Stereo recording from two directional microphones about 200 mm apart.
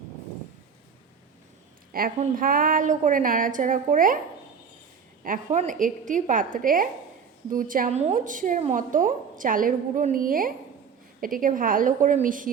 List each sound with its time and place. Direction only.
1.9 s a woman's voice: 45° right (ahead or behind)
5.2 s a woman's voice: 40° right (ahead or behind)